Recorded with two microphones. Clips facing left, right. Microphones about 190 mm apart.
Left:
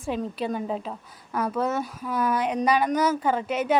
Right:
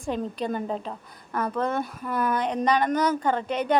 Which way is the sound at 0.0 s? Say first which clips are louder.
Even; 5° left (ahead or behind).